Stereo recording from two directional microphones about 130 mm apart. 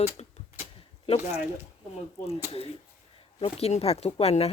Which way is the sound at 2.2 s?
50° left (ahead or behind).